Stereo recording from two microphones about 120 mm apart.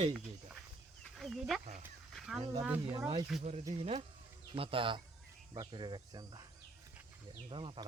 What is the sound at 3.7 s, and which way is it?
Speech, 70° right (ahead or behind).